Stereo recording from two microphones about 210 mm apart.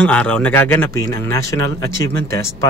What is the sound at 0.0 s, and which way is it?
Speech, 5° left (ahead or behind).